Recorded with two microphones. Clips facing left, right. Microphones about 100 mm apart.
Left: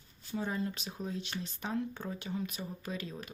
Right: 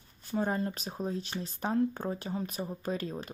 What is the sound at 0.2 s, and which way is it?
Speech, 50° right (ahead or behind).